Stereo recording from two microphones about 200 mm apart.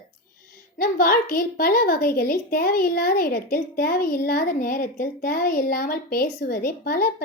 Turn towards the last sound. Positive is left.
turn(degrees=50)  # may be behind; listen again after turning